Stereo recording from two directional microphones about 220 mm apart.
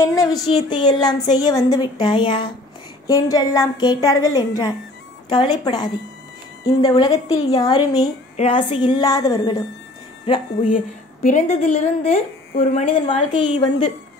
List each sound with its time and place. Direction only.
0.0 s a woman's voice: 15° left (ahead or behind)
11.2 s a woman's voice: 35° left (ahead or behind)